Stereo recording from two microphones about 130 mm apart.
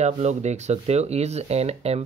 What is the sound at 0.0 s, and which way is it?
Speech, 60° right (ahead or behind).